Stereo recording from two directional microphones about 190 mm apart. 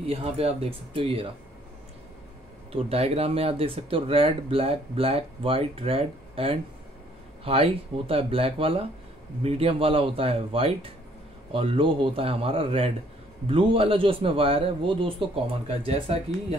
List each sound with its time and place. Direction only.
0.0 s speech: 30° right (ahead or behind)
2.7 s speech: 30° right (ahead or behind)